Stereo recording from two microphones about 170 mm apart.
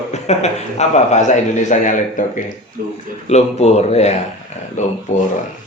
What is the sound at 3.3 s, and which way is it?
Speech, 40° left (ahead or behind).